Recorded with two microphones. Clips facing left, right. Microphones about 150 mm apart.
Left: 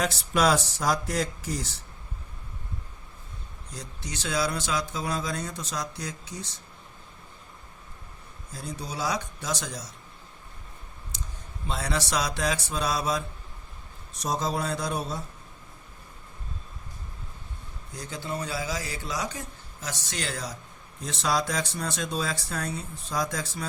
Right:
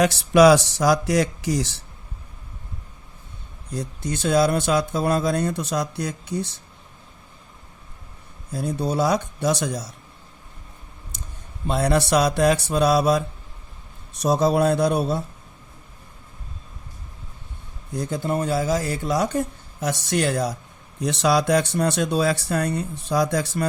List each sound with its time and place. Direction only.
0.0 s speech: 75° right (ahead or behind)
3.7 s speech: 55° right (ahead or behind)
8.5 s speech: 60° right (ahead or behind)
11.7 s speech: 60° right (ahead or behind)
17.9 s speech: 55° right (ahead or behind)